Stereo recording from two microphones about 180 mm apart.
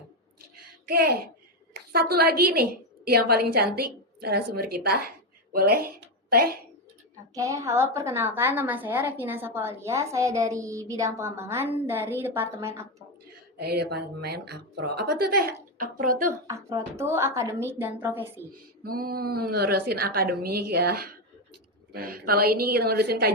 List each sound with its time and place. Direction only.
0.5 s a sound: 55° right (ahead or behind)
1.7 s a woman's voice: 60° right (ahead or behind)
7.3 s a woman's voice: 20° right (ahead or behind)
13.6 s a woman's voice: 65° right (ahead or behind)
16.5 s a woman's voice: 15° right (ahead or behind)
18.8 s a woman's voice: 55° right (ahead or behind)